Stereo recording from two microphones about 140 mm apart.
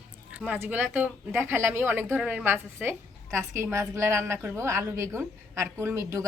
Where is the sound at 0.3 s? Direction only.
10° right (ahead or behind).